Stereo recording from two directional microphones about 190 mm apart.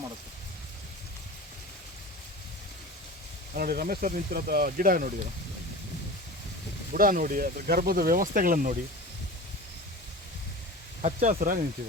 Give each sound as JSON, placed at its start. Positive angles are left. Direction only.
{"t": 3.5, "sound": "speech", "side_deg": -50}
{"t": 6.9, "sound": "speech", "side_deg": -45}
{"t": 11.0, "sound": "speech", "side_deg": -40}